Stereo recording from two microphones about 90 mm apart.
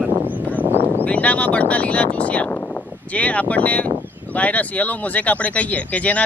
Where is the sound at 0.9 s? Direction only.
20° left (ahead or behind).